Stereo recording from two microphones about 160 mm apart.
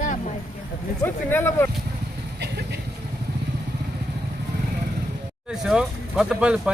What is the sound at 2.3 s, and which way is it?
Vehicle, 90° right.